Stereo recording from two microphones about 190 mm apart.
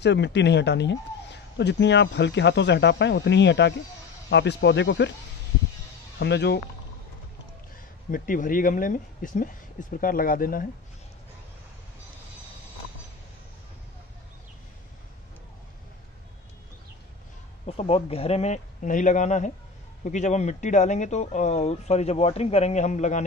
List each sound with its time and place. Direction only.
0.0 s speech: 65° left (ahead or behind)
6.1 s speech: 65° left (ahead or behind)
8.1 s speech: 45° left (ahead or behind)
17.6 s speech: 30° left (ahead or behind)